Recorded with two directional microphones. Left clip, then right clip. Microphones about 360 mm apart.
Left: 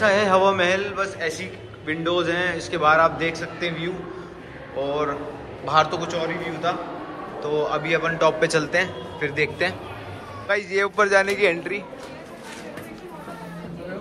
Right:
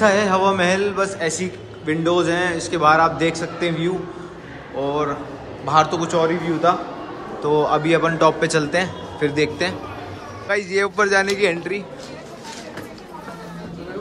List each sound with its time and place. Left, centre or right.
0.0 s a man's voice: centre